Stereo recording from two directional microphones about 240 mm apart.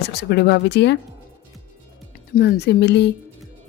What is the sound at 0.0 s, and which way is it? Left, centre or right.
Speech, left.